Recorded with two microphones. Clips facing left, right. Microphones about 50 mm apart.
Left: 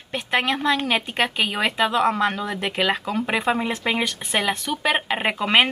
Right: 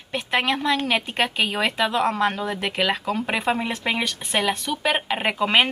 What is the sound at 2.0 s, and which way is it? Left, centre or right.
Speech, left.